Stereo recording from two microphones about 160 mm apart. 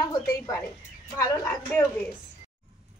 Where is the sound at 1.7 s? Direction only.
10° left (ahead or behind).